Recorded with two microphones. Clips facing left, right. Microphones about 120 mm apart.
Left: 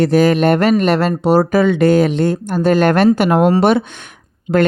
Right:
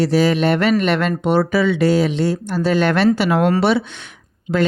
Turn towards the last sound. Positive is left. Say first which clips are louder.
# left 5 dB
turn(degrees=30)  # may be behind; listen again after turning